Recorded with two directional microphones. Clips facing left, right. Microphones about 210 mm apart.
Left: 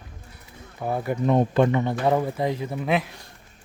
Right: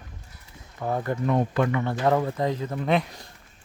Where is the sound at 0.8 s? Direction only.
10° left (ahead or behind).